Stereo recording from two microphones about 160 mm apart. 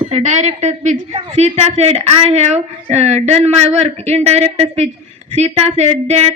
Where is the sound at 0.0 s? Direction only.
45° right (ahead or behind).